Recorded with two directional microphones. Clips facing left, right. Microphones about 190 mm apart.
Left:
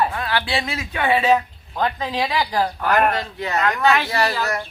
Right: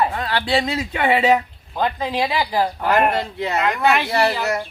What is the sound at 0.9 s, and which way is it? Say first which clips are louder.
A woman's voice: right 1 dB; 20° right (ahead or behind).